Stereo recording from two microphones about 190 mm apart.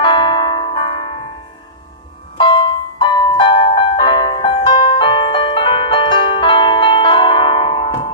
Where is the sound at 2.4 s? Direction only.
25° left (ahead or behind).